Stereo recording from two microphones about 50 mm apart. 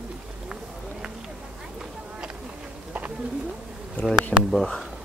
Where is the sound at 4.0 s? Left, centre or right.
Left.